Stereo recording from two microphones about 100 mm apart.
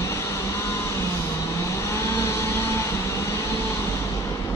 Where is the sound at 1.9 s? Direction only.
30° left (ahead or behind).